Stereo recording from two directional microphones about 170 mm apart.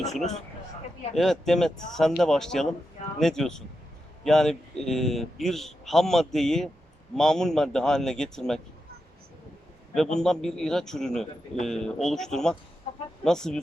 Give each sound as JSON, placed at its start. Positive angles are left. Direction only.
{"t": 0.0, "sound": "a man's voice", "side_deg": 0}
{"t": 9.9, "sound": "a man's voice", "side_deg": 5}